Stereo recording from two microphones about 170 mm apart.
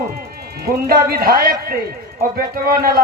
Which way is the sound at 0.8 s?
60° right (ahead or behind).